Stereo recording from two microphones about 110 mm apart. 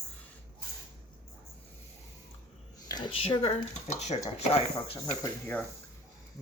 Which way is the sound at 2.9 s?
50° left (ahead or behind).